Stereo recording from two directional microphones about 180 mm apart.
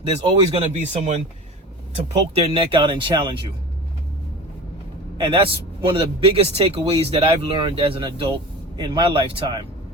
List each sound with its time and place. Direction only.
0.5 s a man's voice: 35° right (ahead or behind)
5.1 s a man's voice: 30° right (ahead or behind)